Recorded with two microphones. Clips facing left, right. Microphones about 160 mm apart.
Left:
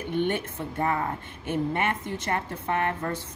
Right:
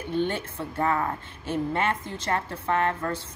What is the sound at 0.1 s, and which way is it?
A woman's voice, 20° left (ahead or behind).